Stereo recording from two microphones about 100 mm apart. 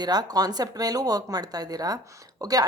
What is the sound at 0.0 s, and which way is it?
A woman's voice, 40° right (ahead or behind).